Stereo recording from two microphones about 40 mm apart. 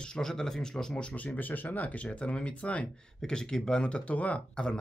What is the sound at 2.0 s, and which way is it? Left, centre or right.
Speech, left.